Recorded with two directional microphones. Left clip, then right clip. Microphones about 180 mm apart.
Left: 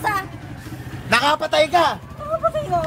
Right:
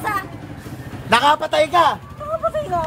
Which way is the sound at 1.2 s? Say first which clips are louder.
Right 2 dB; 10° right (ahead or behind).